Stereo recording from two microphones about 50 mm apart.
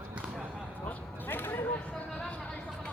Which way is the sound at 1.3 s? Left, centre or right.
Left.